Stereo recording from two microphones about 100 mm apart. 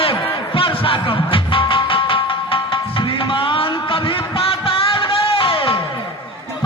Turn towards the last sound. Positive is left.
turn(degrees=65)  # may be behind; listen again after turning